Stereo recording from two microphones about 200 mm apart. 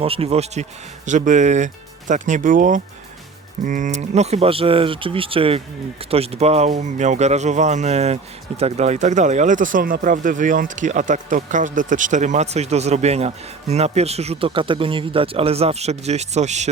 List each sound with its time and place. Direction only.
0.0 s speech: 30° right (ahead or behind)